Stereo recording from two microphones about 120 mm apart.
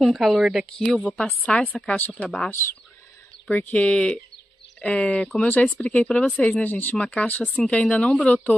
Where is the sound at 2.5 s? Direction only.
20° left (ahead or behind).